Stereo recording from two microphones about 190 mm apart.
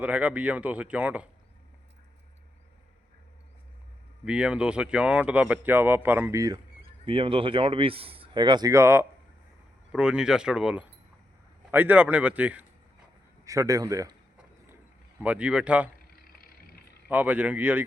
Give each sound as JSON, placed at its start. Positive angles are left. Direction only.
{"t": 0.0, "sound": "speech", "side_deg": -5}
{"t": 4.3, "sound": "speech", "side_deg": -5}
{"t": 7.0, "sound": "a man's voice", "side_deg": -30}
{"t": 15.2, "sound": "speech", "side_deg": -5}
{"t": 16.1, "sound": "vehicle", "side_deg": 50}
{"t": 17.1, "sound": "speech", "side_deg": -10}